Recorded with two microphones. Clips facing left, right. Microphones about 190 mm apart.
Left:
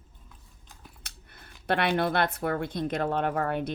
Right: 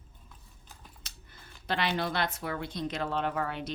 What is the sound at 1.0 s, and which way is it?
Speech, 60° left (ahead or behind).